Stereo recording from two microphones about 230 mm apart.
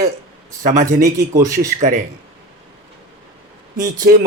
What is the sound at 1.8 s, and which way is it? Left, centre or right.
Speech, right.